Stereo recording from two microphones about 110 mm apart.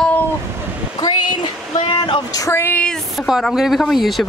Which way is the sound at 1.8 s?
50° left (ahead or behind).